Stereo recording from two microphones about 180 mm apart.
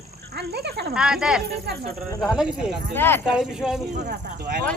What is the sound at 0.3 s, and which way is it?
Speech, 65° right (ahead or behind).